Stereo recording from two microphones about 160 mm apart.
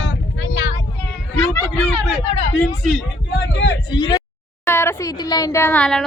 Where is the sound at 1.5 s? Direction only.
10° left (ahead or behind).